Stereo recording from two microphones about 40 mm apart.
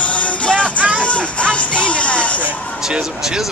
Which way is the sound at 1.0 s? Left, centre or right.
Left.